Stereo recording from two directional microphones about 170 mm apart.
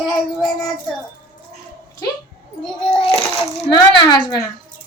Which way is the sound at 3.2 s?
30° left (ahead or behind).